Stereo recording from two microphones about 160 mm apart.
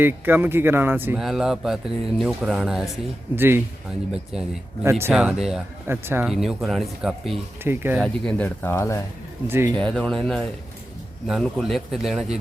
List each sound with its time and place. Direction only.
0.0 s speech: 15° right (ahead or behind)
3.3 s speech: 15° right (ahead or behind)
4.8 s speech: 15° right (ahead or behind)
5.1 s speech: centre (ahead or behind)
5.9 s speech: 15° right (ahead or behind)
6.2 s speech: 5° right (ahead or behind)
7.6 s speech: 15° right (ahead or behind)
8.0 s speech: 5° left (ahead or behind)
8.4 s speech: 15° left (ahead or behind)
9.5 s speech: 15° right (ahead or behind)
9.7 s speech: 5° left (ahead or behind)